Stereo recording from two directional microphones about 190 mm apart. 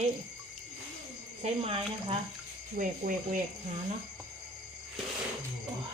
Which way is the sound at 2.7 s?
45° right (ahead or behind).